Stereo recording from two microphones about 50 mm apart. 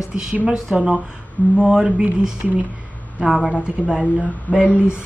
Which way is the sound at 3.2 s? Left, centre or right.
Centre.